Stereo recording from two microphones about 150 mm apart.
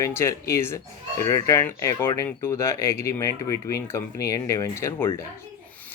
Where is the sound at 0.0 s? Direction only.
20° left (ahead or behind).